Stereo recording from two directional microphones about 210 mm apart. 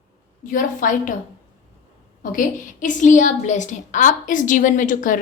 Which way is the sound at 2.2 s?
40° left (ahead or behind).